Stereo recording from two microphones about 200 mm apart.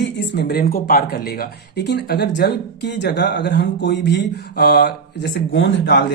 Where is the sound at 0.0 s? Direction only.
60° left (ahead or behind).